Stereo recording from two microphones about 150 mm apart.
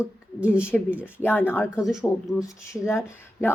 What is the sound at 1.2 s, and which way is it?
Speech, 15° left (ahead or behind).